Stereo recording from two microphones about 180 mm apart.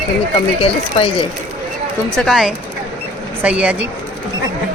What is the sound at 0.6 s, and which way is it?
Speech, 30° left (ahead or behind).